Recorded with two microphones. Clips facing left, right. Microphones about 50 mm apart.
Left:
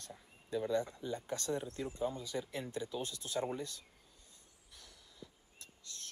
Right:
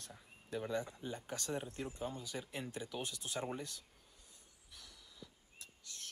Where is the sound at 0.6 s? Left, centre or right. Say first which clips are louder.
Left 5 dB; right.